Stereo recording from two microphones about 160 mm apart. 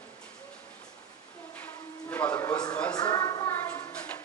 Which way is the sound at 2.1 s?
10° left (ahead or behind).